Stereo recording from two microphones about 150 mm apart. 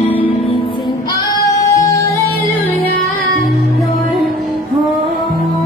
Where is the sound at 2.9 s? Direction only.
75° left (ahead or behind).